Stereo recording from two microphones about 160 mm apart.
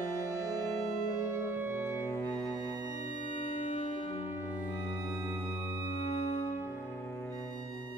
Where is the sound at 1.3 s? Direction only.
15° right (ahead or behind).